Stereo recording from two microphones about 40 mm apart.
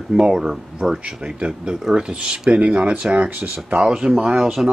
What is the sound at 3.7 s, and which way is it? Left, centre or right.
Speech, centre.